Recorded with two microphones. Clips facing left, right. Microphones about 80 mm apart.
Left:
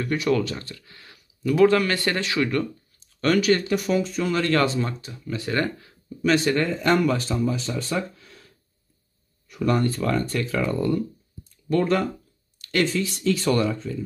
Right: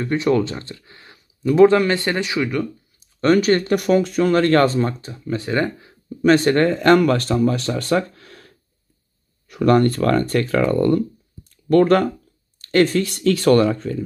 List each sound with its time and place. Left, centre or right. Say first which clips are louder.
0.0 s speech: right 4 dB; right
3.2 s speech: right 5 dB; right
3.4 s speech: right 4 dB; right
5.5 s speech: right 3 dB; right
6.2 s speech: right 6 dB; right
12.5 s speech: right 7 dB; right